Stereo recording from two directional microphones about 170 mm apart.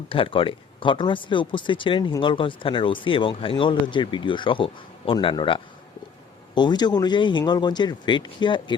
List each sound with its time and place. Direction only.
0.1 s speech: 30° left (ahead or behind)